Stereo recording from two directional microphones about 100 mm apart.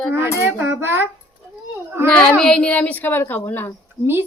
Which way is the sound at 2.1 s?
10° left (ahead or behind).